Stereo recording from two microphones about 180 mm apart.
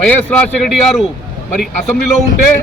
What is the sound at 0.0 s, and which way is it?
A man's voice, 10° left (ahead or behind).